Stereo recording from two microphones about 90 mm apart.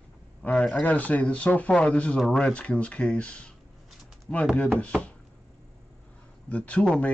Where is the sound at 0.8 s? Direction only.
15° left (ahead or behind).